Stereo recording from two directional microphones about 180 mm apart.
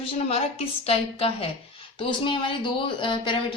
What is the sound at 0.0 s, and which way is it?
A woman's voice, 35° left (ahead or behind).